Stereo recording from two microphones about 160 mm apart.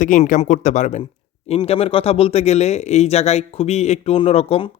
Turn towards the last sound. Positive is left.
turn(degrees=35)  # may be behind; listen again after turning